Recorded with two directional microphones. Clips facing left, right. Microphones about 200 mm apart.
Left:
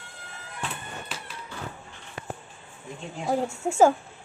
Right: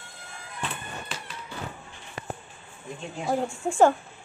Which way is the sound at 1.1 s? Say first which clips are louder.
Right 1 dB; 5° left (ahead or behind).